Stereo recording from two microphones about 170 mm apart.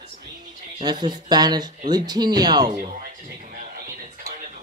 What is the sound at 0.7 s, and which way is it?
Speech, 25° right (ahead or behind).